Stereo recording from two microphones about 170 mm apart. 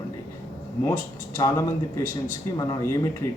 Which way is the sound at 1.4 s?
20° left (ahead or behind).